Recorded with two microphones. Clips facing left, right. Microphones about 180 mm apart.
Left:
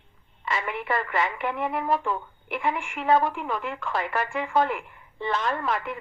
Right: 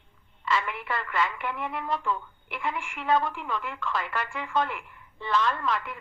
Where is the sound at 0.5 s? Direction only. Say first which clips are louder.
Left 3 dB; 25° left (ahead or behind).